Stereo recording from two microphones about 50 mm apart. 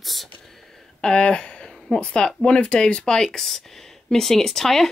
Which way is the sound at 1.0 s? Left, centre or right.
Centre.